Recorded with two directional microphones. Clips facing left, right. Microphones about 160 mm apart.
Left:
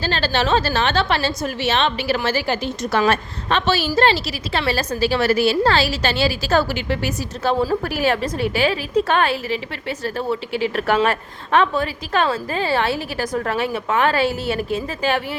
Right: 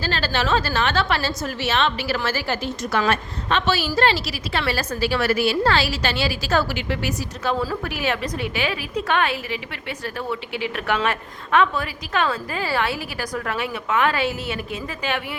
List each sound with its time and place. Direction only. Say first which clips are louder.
0.0 s a woman's voice: left 3 dB; 25° left (ahead or behind)
3.1 s a woman's voice: left 2 dB; 30° left (ahead or behind)